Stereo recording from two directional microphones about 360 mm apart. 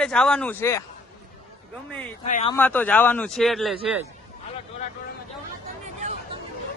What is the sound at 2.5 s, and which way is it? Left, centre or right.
Speech, centre.